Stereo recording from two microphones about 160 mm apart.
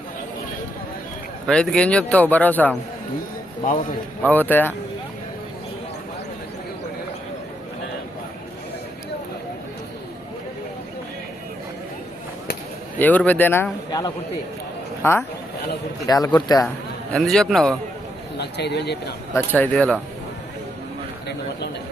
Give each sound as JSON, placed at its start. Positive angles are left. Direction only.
{"t": 1.5, "sound": "speech", "side_deg": 5}
{"t": 4.2, "sound": "speech", "side_deg": 10}
{"t": 13.0, "sound": "speech", "side_deg": 10}
{"t": 17.1, "sound": "a man's voice", "side_deg": 0}
{"t": 18.3, "sound": "speech", "side_deg": 90}
{"t": 19.3, "sound": "speech", "side_deg": 10}